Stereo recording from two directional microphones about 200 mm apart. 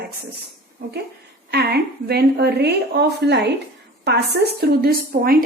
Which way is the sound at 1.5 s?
55° right (ahead or behind).